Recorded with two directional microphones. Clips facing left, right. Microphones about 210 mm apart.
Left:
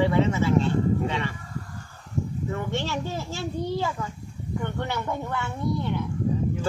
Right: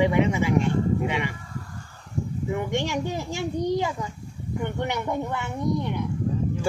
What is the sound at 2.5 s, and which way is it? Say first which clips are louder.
Speech: right 5 dB; 15° right (ahead or behind).